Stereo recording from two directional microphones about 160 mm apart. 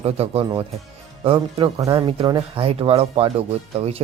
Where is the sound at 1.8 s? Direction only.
30° right (ahead or behind).